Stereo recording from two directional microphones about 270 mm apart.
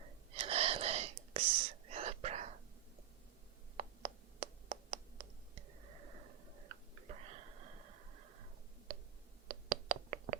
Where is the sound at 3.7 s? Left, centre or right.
Right.